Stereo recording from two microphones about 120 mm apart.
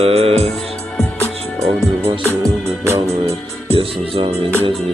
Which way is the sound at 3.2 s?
55° right (ahead or behind).